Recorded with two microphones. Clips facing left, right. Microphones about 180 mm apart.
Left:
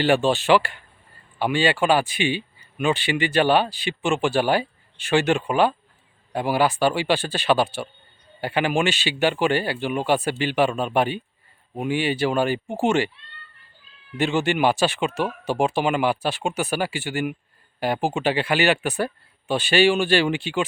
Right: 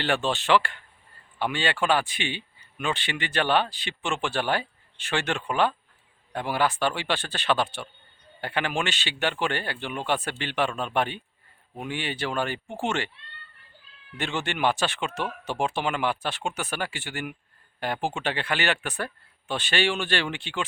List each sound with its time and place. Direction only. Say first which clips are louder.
0.0 s speech: left 7 dB; 10° left (ahead or behind)
14.2 s speech: left 7 dB; 10° left (ahead or behind)